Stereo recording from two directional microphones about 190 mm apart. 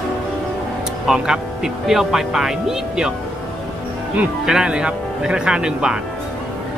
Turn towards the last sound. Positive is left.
turn(degrees=-5)  # may be behind; listen again after turning